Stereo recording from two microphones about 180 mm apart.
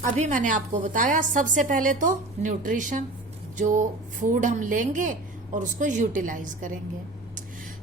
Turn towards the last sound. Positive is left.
turn(degrees=-45)  # may be behind; listen again after turning